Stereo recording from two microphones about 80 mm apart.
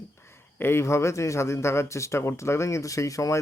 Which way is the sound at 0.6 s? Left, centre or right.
Left.